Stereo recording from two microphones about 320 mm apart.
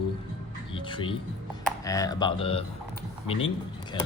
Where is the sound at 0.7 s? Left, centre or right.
Centre.